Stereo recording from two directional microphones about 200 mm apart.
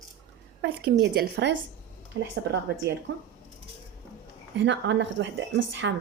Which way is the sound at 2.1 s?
65° right (ahead or behind).